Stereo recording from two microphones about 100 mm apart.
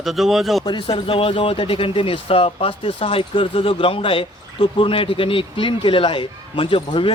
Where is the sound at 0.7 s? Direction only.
55° left (ahead or behind).